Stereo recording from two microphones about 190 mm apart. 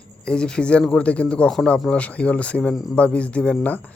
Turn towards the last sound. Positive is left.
turn(degrees=10)  # may be behind; listen again after turning